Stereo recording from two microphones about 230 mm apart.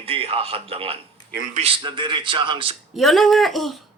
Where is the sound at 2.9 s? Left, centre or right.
Centre.